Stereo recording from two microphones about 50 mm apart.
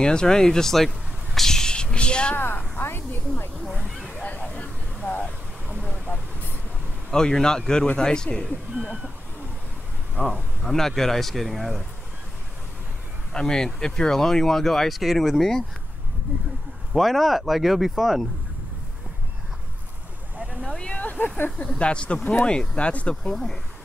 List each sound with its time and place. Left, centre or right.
0.0 s a sound: centre
2.3 s a woman's voice: left
4.2 s vehicle: left
7.1 s speech: centre
10.3 s speech: centre
13.3 s speech: centre
16.3 s speech: right
16.9 s speech: centre
20.6 s speech: centre
21.0 s a sound: left
21.5 s speech: left
23.3 s speech: centre